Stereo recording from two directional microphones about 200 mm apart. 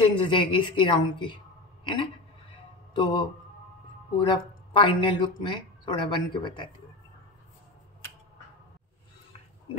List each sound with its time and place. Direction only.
0.0 s speech: 25° left (ahead or behind)
2.9 s speech: 25° left (ahead or behind)